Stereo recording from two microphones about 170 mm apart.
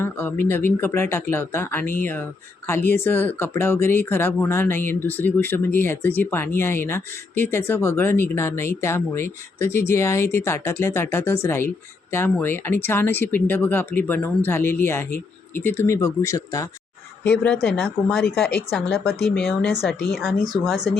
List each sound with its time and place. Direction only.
0.0 s speech: 15° left (ahead or behind)
17.4 s speech: 5° left (ahead or behind)